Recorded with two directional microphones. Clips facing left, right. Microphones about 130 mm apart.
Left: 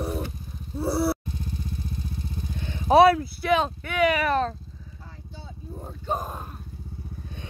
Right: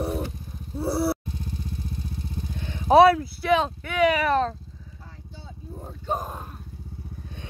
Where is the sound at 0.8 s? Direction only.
Centre (ahead or behind).